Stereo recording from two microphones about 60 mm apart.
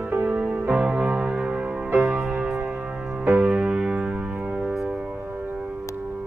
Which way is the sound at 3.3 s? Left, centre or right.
Right.